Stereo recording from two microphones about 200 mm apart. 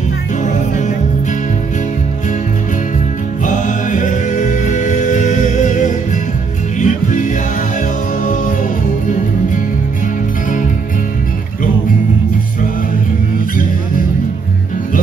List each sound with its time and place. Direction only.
0.4 s music: 35° left (ahead or behind)
3.4 s music: 40° left (ahead or behind)